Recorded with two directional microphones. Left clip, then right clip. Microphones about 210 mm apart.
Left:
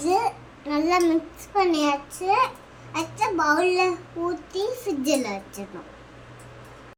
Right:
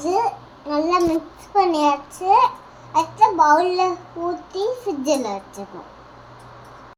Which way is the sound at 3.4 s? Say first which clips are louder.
Right 5 dB; 30° left (ahead or behind).